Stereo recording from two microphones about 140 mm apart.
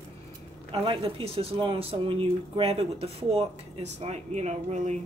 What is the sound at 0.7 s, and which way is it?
Speech, 40° right (ahead or behind).